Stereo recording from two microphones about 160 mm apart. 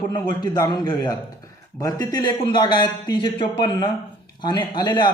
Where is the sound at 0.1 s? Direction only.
25° left (ahead or behind).